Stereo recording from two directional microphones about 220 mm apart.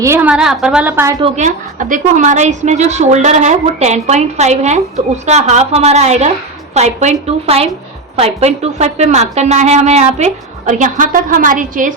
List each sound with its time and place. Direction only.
0.0 s a woman's voice: 10° right (ahead or behind)
1.2 s a woman's voice: 35° right (ahead or behind)